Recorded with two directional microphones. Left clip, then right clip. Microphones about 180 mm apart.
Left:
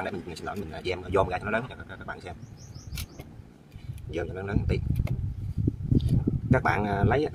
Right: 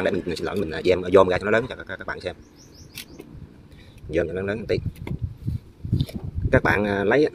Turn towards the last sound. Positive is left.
turn(degrees=-30)  # may be behind; listen again after turning